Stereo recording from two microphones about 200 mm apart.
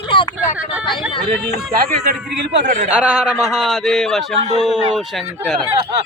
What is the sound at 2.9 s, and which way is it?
A man's voice, 5° right (ahead or behind).